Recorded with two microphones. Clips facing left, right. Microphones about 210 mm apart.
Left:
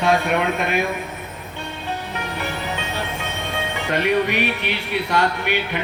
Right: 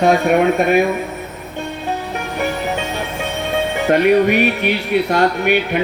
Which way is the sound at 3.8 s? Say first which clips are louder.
Right 7 dB; 45° right (ahead or behind).